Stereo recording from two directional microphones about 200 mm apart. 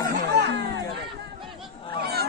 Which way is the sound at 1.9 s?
55° right (ahead or behind).